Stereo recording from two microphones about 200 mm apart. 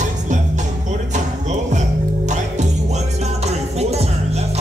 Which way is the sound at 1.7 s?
35° right (ahead or behind).